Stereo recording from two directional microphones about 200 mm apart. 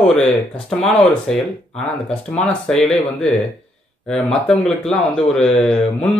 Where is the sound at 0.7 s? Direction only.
5° left (ahead or behind).